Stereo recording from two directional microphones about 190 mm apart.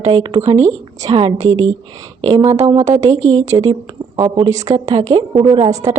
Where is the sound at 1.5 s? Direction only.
90° right.